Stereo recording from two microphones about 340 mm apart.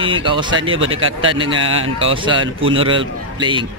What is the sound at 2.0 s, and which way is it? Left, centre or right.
Speech, centre.